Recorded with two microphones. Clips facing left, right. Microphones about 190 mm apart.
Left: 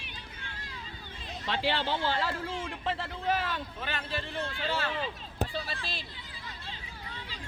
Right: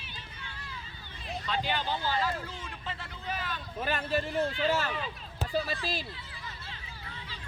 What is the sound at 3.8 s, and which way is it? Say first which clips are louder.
Speech: right 6 dB; 45° right (ahead or behind).